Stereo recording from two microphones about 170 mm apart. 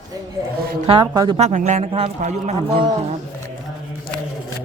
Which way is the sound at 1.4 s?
45° right (ahead or behind).